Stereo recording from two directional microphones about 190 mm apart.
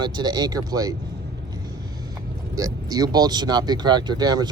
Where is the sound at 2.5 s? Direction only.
20° right (ahead or behind).